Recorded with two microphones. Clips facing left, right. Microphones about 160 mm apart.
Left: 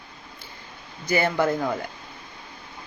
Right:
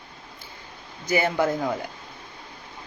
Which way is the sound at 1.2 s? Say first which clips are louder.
Even; 5° right (ahead or behind).